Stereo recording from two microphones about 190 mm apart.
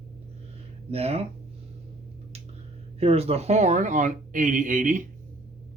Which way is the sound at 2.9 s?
30° right (ahead or behind).